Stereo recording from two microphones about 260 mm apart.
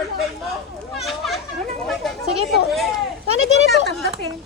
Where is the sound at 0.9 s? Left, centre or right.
Centre.